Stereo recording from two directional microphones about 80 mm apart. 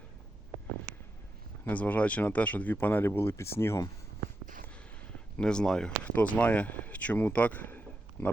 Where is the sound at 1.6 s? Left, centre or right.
Centre.